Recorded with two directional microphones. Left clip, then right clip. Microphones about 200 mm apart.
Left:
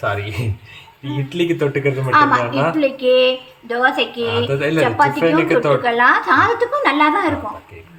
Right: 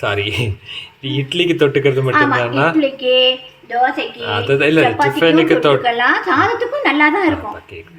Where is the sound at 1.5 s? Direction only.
20° right (ahead or behind).